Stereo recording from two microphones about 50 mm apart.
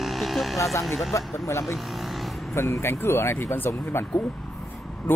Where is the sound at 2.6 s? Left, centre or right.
Left.